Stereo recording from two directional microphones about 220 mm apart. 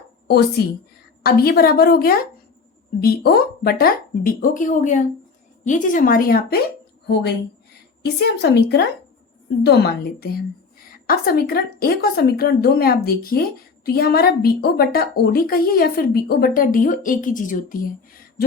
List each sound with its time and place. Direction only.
0.3 s speech: 45° left (ahead or behind)